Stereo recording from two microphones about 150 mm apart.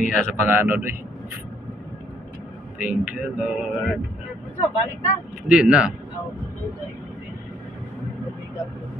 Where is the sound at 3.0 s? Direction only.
5° right (ahead or behind).